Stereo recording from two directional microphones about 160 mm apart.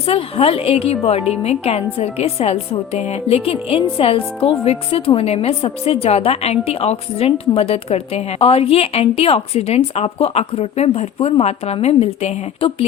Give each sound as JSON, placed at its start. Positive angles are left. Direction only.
{"t": 0.0, "sound": "a woman's voice", "side_deg": 40}